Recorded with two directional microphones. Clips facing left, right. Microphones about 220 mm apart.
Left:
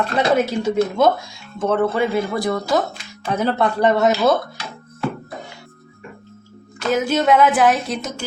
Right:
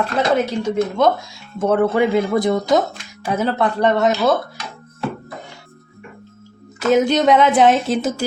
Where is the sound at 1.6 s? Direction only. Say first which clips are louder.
Right 3 dB; 10° right (ahead or behind).